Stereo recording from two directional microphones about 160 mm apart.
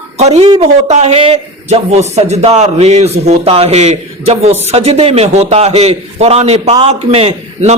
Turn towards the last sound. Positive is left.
turn(degrees=-40)  # may be behind; listen again after turning